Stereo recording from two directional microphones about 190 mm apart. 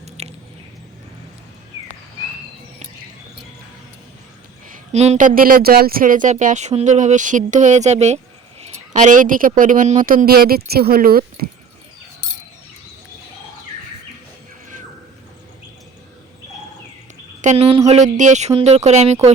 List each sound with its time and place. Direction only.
0.0 s squish: 35° right (ahead or behind)
4.9 s speech: 35° right (ahead or behind); by 11.3 s 50° right (ahead or behind)
17.4 s speech: 35° right (ahead or behind)